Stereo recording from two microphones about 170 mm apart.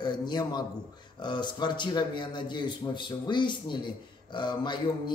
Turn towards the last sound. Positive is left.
turn(degrees=25)  # may be behind; listen again after turning